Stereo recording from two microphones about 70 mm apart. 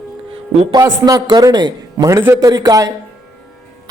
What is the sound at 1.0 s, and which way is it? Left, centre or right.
A man's voice, right.